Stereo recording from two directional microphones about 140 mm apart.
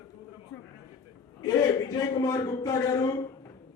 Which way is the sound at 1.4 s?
25° left (ahead or behind).